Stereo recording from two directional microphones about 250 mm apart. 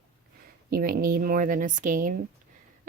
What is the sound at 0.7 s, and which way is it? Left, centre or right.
Speech, right.